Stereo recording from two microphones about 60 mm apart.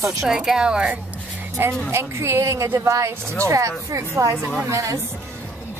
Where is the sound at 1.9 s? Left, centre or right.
Right.